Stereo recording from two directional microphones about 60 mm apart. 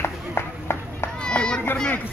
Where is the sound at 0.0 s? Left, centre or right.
Left.